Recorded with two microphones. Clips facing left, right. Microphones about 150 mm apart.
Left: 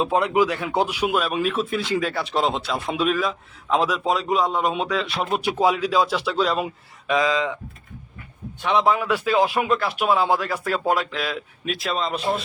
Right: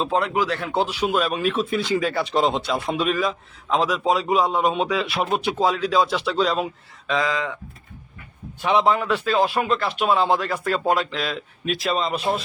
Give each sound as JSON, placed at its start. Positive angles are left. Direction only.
{"t": 0.0, "sound": "speech", "side_deg": 15}
{"t": 5.4, "sound": "speech", "side_deg": 10}
{"t": 7.1, "sound": "speech", "side_deg": 20}
{"t": 8.6, "sound": "speech", "side_deg": -5}